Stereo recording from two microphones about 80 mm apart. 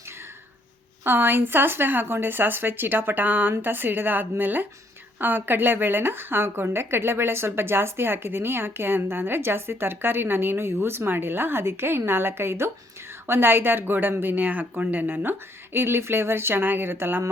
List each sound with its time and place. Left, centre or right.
1.0 s speech: right